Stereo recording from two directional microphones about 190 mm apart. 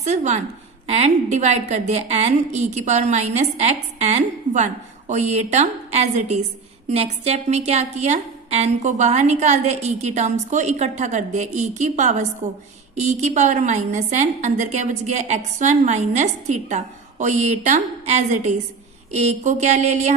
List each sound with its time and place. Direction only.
0.0 s a woman's voice: 35° right (ahead or behind)